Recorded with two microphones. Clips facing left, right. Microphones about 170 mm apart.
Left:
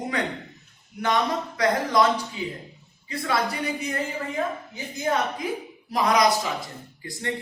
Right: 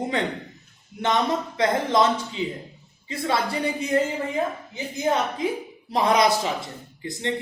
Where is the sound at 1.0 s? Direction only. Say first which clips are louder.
Right 1 dB; 25° right (ahead or behind).